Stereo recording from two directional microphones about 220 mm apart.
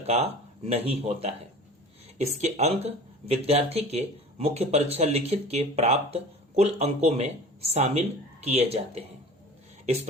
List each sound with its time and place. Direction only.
0.0 s speech: 30° right (ahead or behind)